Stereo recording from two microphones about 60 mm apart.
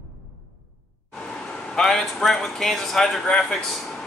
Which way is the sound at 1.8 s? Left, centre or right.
Centre.